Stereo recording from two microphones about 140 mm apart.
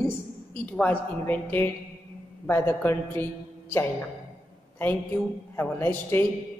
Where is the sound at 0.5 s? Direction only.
10° left (ahead or behind).